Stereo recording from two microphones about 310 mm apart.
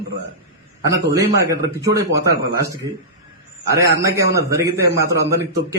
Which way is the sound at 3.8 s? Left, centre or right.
Centre.